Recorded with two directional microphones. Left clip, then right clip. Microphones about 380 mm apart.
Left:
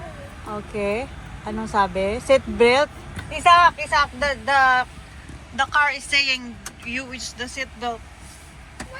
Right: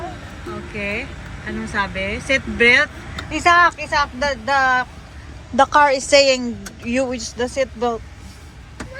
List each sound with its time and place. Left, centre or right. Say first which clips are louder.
0.8 s speech: left 1 dB; centre
3.2 s speech: even; centre